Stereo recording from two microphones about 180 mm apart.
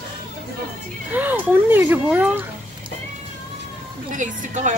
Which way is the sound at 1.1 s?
10° right (ahead or behind).